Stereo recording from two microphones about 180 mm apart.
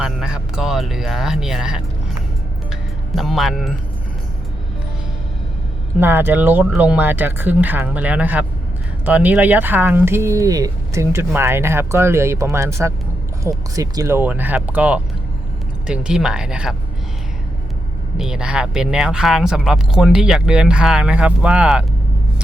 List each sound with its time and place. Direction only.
0.0 s speech: 5° right (ahead or behind)
3.2 s speech: centre (ahead or behind)
6.0 s speech: 10° right (ahead or behind)
18.2 s speech: 5° right (ahead or behind)